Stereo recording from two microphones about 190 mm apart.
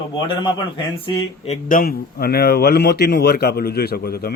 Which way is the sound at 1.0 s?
30° left (ahead or behind).